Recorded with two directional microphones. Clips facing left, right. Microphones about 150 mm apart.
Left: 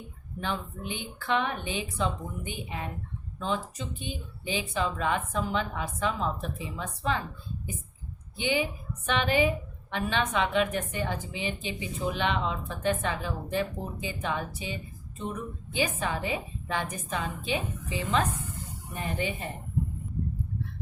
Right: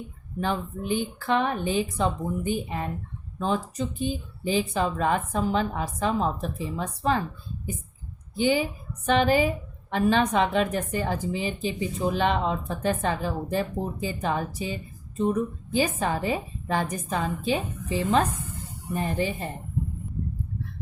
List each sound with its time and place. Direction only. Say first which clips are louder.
0.3 s a woman's voice: right 5 dB; 40° right (ahead or behind)
8.4 s a woman's voice: right 5 dB; 40° right (ahead or behind)